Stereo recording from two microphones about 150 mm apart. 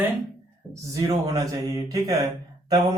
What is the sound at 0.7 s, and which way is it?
Speech, 20° right (ahead or behind).